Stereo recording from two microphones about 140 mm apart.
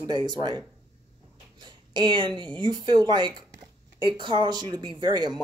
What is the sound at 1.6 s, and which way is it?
Speech, 35° right (ahead or behind).